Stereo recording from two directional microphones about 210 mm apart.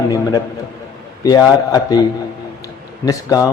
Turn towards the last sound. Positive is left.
turn(degrees=15)  # may be behind; listen again after turning